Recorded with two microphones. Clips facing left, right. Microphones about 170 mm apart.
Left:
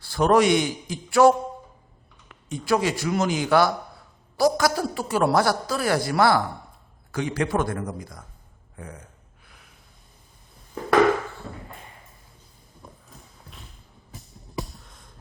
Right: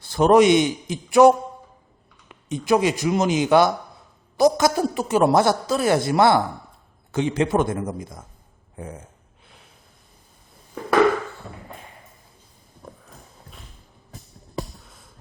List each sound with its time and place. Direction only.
0.0 s a man's voice: 20° right (ahead or behind)
2.3 s a man's voice: 20° right (ahead or behind)
14.8 s a sound: 5° right (ahead or behind)